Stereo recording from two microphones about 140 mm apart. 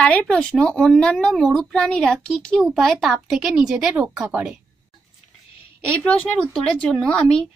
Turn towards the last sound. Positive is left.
turn(degrees=5)  # may be behind; listen again after turning